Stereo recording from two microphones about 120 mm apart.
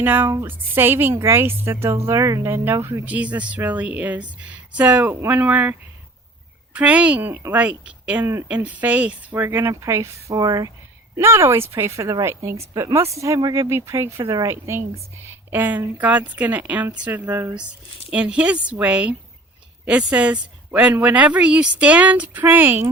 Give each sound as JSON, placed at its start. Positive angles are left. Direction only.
{"t": 0.0, "sound": "a woman's voice", "side_deg": -15}
{"t": 6.7, "sound": "a woman's voice", "side_deg": -10}
{"t": 11.2, "sound": "a woman's voice", "side_deg": -20}